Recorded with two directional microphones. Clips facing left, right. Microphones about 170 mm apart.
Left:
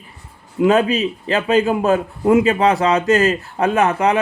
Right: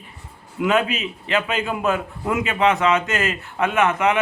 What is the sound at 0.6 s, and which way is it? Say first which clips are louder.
A man's voice: left 6 dB; 35° left (ahead or behind).